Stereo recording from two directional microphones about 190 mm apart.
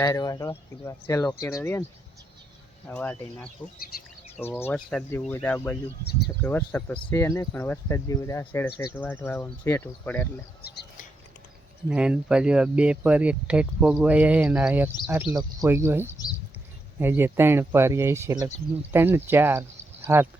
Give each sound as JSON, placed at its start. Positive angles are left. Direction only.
{"t": 0.0, "sound": "speech", "side_deg": 20}
{"t": 2.8, "sound": "speech", "side_deg": 5}
{"t": 10.6, "sound": "a sound", "side_deg": 60}
{"t": 11.9, "sound": "speech", "side_deg": -5}